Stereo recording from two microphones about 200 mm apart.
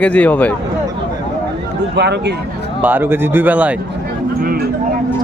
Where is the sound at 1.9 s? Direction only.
55° right (ahead or behind).